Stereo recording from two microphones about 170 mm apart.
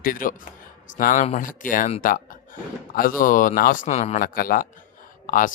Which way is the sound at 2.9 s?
55° left (ahead or behind).